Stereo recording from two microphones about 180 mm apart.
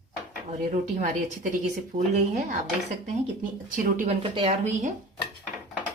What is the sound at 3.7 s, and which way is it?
A woman's voice, 50° right (ahead or behind).